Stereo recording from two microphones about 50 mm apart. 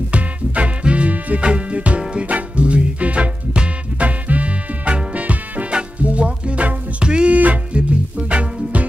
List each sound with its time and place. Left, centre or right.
0.1 s music: right